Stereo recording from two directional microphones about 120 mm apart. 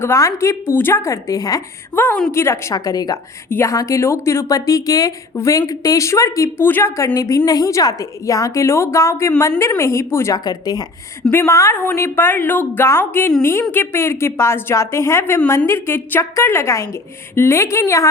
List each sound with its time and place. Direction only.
0.0 s a woman's voice: 25° left (ahead or behind)
2.0 s a woman's voice: 15° left (ahead or behind); by 10.8 s 35° left (ahead or behind)
11.3 s a woman's voice: 20° left (ahead or behind)